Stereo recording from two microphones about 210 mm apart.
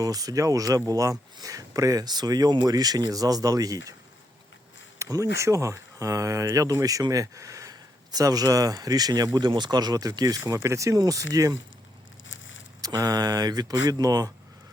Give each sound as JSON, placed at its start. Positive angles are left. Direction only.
{"t": 0.0, "sound": "speech", "side_deg": -15}
{"t": 4.9, "sound": "a sound", "side_deg": -15}
{"t": 5.4, "sound": "speech", "side_deg": -15}
{"t": 12.8, "sound": "speech", "side_deg": -15}